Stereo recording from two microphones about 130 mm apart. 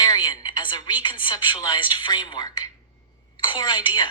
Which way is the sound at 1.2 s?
40° left (ahead or behind).